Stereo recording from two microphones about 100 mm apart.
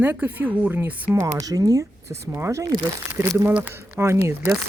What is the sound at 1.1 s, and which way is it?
Speech, 30° right (ahead or behind).